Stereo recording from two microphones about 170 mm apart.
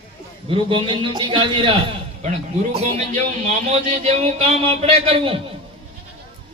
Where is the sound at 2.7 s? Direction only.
45° right (ahead or behind).